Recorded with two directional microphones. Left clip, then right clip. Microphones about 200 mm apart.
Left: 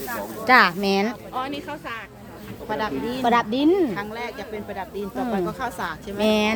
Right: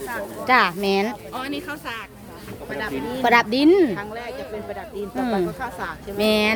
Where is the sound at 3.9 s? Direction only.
55° left (ahead or behind).